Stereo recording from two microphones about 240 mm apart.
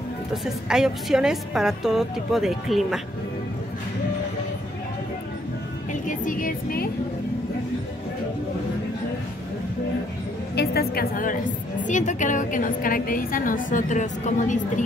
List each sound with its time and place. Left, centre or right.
0.3 s a woman's voice: centre
6.0 s a woman's voice: left
10.5 s music: left
11.8 s a woman's voice: left